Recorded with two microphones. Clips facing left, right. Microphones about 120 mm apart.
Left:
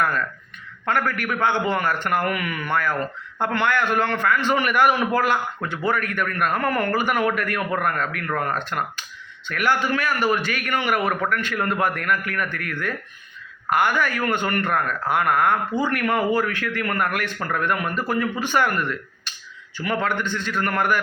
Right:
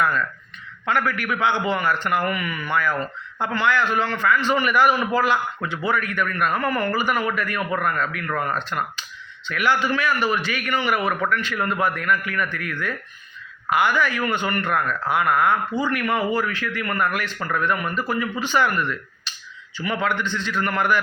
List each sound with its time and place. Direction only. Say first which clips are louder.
0.9 s a man's voice: even; 50° left (ahead or behind)